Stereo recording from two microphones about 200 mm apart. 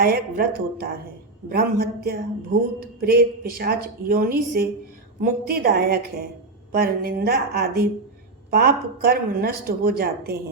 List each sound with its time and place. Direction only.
0.0 s speech: 50° right (ahead or behind)